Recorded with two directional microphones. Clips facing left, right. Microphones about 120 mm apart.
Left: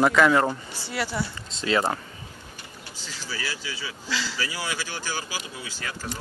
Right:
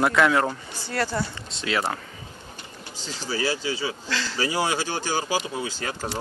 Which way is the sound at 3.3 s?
40° right (ahead or behind).